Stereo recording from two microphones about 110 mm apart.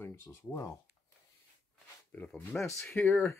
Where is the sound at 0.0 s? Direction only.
25° left (ahead or behind).